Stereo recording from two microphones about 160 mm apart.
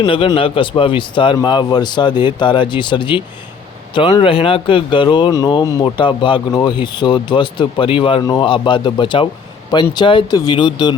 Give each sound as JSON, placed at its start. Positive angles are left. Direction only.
{"t": 0.0, "sound": "speech", "side_deg": 30}